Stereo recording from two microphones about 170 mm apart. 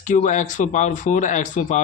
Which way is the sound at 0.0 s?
45° left (ahead or behind).